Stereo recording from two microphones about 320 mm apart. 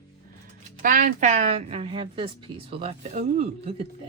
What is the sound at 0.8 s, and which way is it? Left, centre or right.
Speech, right.